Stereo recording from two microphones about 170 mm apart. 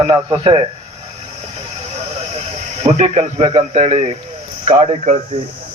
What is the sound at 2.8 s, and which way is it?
A man's voice, 40° right (ahead or behind).